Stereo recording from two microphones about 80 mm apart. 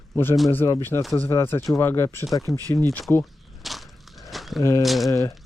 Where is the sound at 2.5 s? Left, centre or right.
Left.